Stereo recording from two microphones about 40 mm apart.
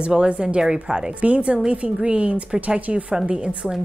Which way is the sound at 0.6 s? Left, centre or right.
Centre.